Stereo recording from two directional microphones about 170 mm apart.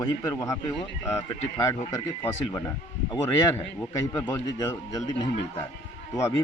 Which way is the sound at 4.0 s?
15° left (ahead or behind).